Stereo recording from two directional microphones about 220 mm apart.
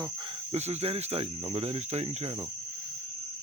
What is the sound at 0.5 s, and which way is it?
Speech, 30° right (ahead or behind).